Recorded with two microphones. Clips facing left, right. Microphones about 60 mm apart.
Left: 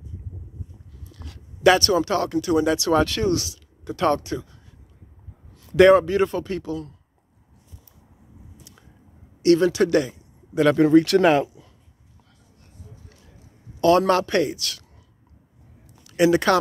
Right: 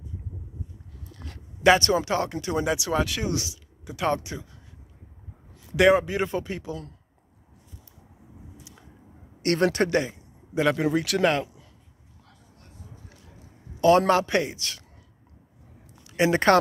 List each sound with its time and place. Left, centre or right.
1.1 s a sound: right
1.6 s a man's voice: right
2.6 s a man's voice: centre
5.6 s a man's voice: centre
9.4 s speech: right
9.8 s a sound: right
10.6 s speech: centre
13.7 s a man's voice: right
16.0 s speech: right